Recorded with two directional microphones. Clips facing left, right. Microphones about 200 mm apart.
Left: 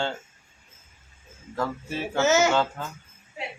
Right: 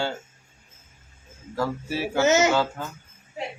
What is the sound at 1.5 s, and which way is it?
Speech, 10° right (ahead or behind).